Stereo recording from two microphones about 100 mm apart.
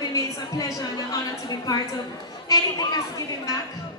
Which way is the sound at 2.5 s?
40° left (ahead or behind).